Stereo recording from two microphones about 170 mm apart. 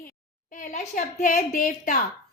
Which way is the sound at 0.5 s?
45° left (ahead or behind).